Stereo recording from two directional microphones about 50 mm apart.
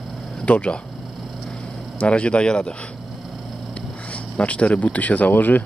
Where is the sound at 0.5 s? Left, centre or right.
Left.